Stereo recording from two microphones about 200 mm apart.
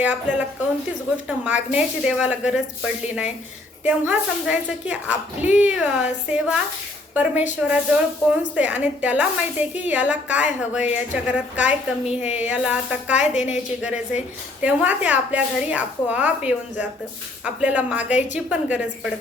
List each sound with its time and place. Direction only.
0.0 s a woman's voice: 10° right (ahead or behind)
1.7 s a woman's voice: 5° right (ahead or behind)
13.2 s a woman's voice: 35° left (ahead or behind)
13.8 s a woman's voice: 5° right (ahead or behind)